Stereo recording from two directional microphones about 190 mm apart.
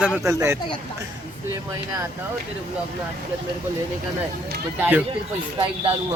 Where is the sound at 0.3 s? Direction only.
15° right (ahead or behind).